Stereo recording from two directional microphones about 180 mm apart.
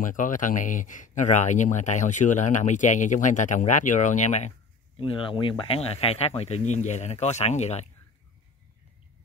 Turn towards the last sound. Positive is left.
turn(degrees=40)  # may be behind; listen again after turning